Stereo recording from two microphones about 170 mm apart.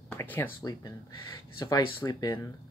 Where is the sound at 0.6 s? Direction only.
25° left (ahead or behind).